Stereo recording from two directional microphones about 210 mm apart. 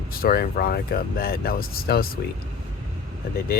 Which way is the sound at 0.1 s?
45° left (ahead or behind).